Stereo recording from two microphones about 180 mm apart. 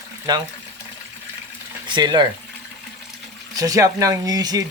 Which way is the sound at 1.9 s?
25° right (ahead or behind).